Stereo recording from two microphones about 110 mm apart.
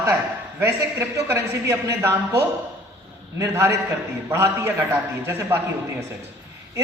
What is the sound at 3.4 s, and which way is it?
A man's voice, 25° right (ahead or behind).